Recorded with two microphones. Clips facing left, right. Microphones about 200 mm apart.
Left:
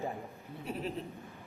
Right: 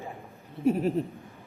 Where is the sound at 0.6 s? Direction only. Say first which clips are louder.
Right 13 dB; 45° right (ahead or behind).